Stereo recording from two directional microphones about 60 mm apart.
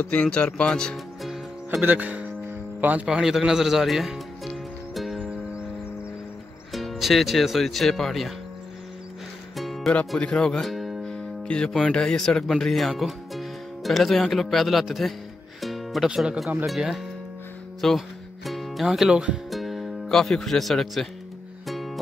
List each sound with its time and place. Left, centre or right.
0.0 s speech: left
0.9 s music: centre
1.8 s speech: right
3.1 s speech: centre
4.9 s music: centre
6.7 s speech: centre
9.6 s music: centre
10.2 s speech: centre
10.7 s music: centre
11.1 s music: centre
11.7 s speech: centre
15.6 s music: centre
16.6 s speech: centre
19.5 s music: centre